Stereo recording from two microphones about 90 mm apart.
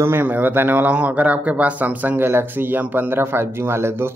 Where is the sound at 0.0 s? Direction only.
25° right (ahead or behind).